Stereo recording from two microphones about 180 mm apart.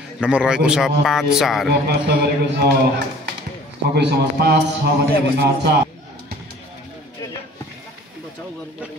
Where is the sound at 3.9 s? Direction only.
65° right (ahead or behind).